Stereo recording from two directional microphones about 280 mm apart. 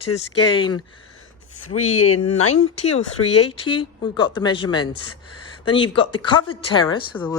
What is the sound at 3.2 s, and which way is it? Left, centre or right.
Speech, left.